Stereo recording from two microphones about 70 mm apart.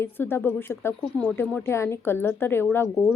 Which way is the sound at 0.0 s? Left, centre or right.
Left.